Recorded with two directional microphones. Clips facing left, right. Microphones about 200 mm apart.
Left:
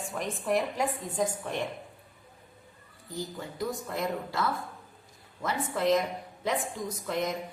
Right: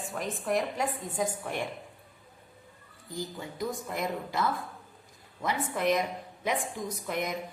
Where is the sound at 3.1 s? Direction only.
15° right (ahead or behind).